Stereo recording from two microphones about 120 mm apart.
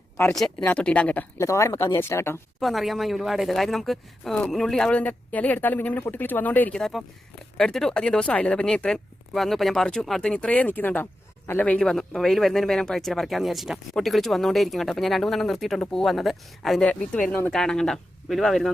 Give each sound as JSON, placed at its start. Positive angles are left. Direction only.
{"t": 0.7, "sound": "speech", "side_deg": 10}
{"t": 1.4, "sound": "speech", "side_deg": 25}
{"t": 2.6, "sound": "speech", "side_deg": 0}